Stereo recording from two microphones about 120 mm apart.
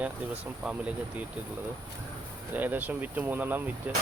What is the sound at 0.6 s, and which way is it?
Speech, 10° right (ahead or behind).